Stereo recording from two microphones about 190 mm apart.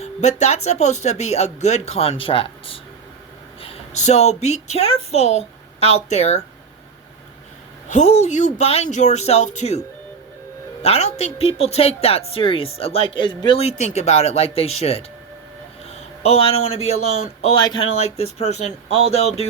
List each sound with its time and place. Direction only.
0.0 s a woman's voice: 40° left (ahead or behind)
7.9 s speech: 40° left (ahead or behind)
10.8 s speech: 35° left (ahead or behind)
15.9 s a sound: 35° left (ahead or behind)
16.7 s speech: 35° left (ahead or behind)
17.6 s speech: 25° left (ahead or behind)